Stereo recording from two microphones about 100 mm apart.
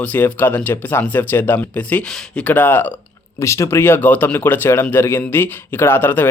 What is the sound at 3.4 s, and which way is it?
Speech, 30° left (ahead or behind).